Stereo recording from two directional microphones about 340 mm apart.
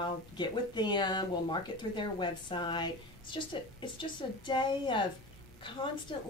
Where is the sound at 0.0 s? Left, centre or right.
Centre.